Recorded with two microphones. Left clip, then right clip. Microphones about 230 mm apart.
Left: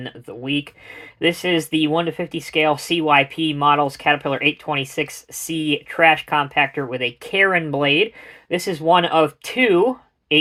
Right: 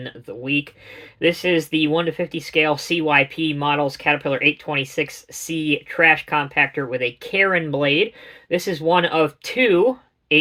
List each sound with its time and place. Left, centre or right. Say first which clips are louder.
0.0 s speech: even; left